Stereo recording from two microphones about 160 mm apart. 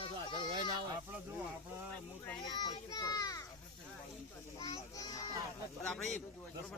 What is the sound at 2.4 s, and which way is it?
Speech, 25° left (ahead or behind).